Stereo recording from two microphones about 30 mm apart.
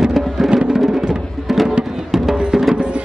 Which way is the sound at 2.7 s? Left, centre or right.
Right.